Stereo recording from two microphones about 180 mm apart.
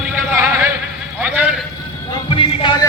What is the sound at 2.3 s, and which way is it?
Music, 30° left (ahead or behind).